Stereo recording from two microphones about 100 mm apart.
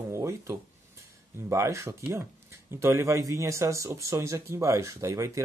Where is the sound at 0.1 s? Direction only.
30° right (ahead or behind).